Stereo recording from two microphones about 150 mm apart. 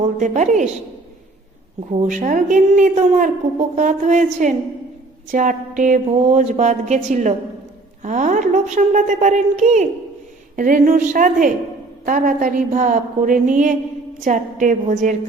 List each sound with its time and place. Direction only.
0.0 s a woman's voice: 55° right (ahead or behind)
1.9 s a woman's voice: 50° right (ahead or behind)
10.5 s a woman's voice: 65° right (ahead or behind)